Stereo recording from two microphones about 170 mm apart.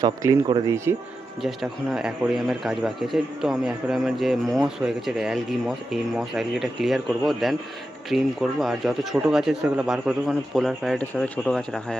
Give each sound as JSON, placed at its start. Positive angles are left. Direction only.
{"t": 0.0, "sound": "speech", "side_deg": -20}
{"t": 1.4, "sound": "speech", "side_deg": 0}